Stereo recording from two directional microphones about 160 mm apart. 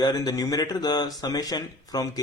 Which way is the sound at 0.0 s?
25° left (ahead or behind).